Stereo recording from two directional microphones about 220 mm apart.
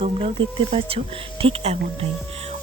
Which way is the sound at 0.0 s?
25° right (ahead or behind).